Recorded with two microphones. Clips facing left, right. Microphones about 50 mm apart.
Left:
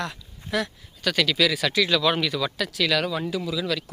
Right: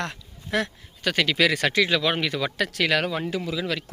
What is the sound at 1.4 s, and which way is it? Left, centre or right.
Speech, right.